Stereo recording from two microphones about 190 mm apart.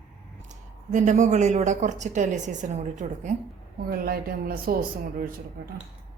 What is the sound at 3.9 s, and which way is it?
Speech, 50° right (ahead or behind).